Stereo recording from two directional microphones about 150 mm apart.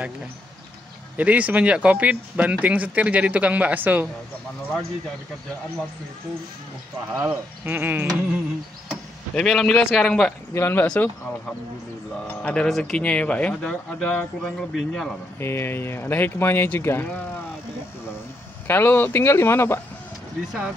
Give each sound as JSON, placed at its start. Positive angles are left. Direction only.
{"t": 1.1, "sound": "speech", "side_deg": -10}
{"t": 7.2, "sound": "speech", "side_deg": -10}
{"t": 8.8, "sound": "speech", "side_deg": 0}
{"t": 12.4, "sound": "speech", "side_deg": 5}
{"t": 15.3, "sound": "speech", "side_deg": 15}
{"t": 18.7, "sound": "speech", "side_deg": 15}